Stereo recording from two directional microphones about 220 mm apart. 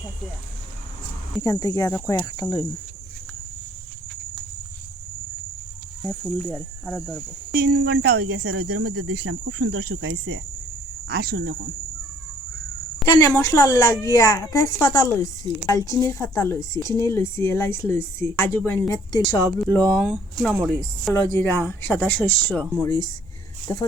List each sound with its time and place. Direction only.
1.4 s speech: 15° left (ahead or behind)
6.2 s speech: 5° right (ahead or behind)
7.6 s speech: 45° right (ahead or behind)
8.9 s speech: 90° right
9.2 s cricket: 60° right (ahead or behind)
11.1 s speech: 45° right (ahead or behind)
13.1 s speech: 15° left (ahead or behind); by 21.1 s centre (ahead or behind)
21.1 s speech: 10° left (ahead or behind)